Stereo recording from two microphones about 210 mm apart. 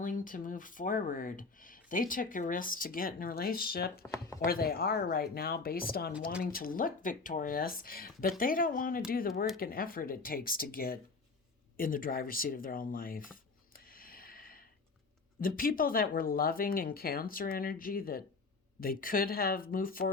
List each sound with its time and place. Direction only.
0.0 s speech: 40° left (ahead or behind)
4.1 s speech: 15° left (ahead or behind)
4.4 s speech: 45° left (ahead or behind)
11.8 s a sound: 40° left (ahead or behind)
15.4 s speech: 45° left (ahead or behind)